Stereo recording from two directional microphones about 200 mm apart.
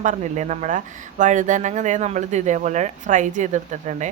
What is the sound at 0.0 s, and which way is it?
Speech, 40° right (ahead or behind).